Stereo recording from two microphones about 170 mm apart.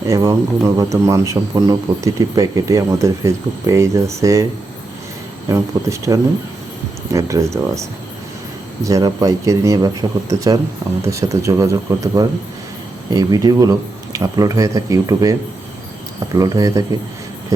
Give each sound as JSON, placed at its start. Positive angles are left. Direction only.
{"t": 0.1, "sound": "speech", "side_deg": -20}
{"t": 5.5, "sound": "speech", "side_deg": -20}